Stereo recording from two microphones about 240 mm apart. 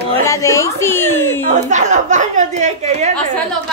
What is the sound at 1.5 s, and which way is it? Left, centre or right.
A woman's voice, right.